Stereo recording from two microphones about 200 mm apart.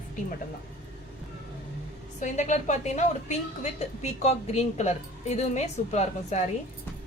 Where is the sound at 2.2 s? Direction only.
40° left (ahead or behind).